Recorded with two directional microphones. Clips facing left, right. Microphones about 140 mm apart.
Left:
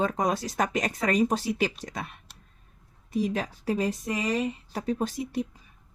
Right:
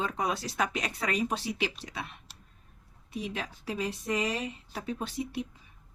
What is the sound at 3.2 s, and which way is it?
Speech, 45° left (ahead or behind).